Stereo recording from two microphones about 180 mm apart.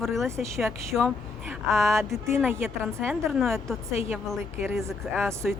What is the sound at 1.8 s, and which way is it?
A woman's voice, 15° right (ahead or behind).